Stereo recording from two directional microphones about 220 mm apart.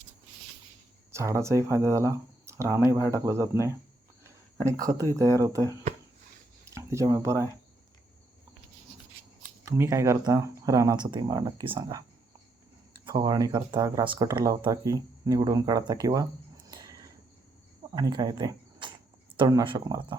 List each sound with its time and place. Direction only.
1.1 s speech: 15° right (ahead or behind)
9.6 s speech: 10° right (ahead or behind)
13.1 s speech: 20° right (ahead or behind)
16.6 s a sound: 15° right (ahead or behind)
17.9 s speech: 20° right (ahead or behind)